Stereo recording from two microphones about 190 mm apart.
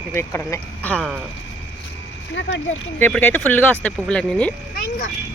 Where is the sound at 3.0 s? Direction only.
10° left (ahead or behind).